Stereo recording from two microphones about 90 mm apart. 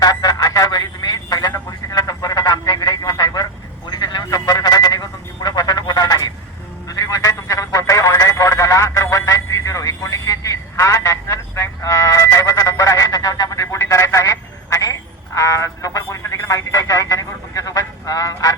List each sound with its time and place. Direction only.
0.0 s telephone: 45° left (ahead or behind)
3.8 s a sound: 50° left (ahead or behind)
6.8 s telephone: 40° left (ahead or behind)